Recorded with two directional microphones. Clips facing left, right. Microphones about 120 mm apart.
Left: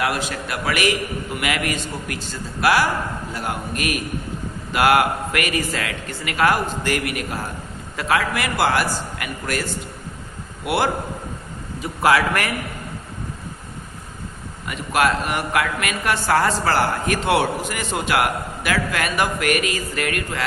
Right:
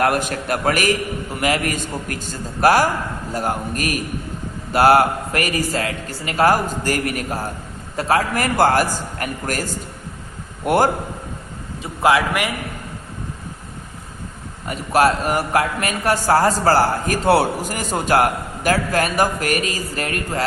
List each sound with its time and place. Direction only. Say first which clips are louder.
0.0 s a man's voice: right 5 dB; 50° right (ahead or behind)
11.8 s a man's voice: right 1 dB; 25° right (ahead or behind)
14.7 s a man's voice: right 3 dB; 35° right (ahead or behind)